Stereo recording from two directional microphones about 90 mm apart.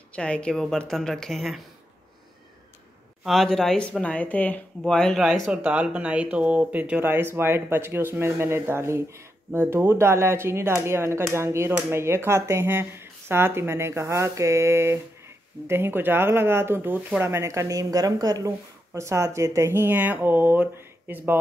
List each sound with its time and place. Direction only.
0.1 s speech: 10° left (ahead or behind)
3.3 s speech: centre (ahead or behind)
5.5 s speech: 15° right (ahead or behind)